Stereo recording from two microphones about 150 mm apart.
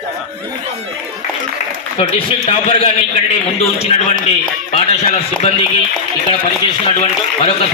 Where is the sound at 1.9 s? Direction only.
40° left (ahead or behind).